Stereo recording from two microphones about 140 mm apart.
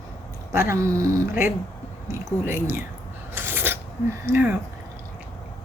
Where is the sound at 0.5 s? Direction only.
20° right (ahead or behind).